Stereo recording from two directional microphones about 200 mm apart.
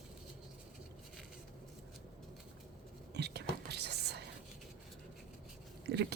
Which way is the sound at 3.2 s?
55° right (ahead or behind).